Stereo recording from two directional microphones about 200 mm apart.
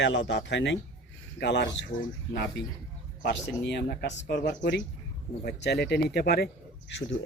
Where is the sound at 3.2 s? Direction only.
60° left (ahead or behind).